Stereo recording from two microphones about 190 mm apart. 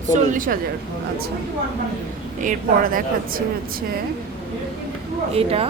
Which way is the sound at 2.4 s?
45° right (ahead or behind).